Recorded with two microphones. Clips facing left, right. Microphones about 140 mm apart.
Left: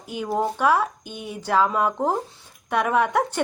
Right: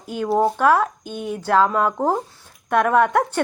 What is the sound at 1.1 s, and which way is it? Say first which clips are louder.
Speech: right 7 dB; 50° right (ahead or behind).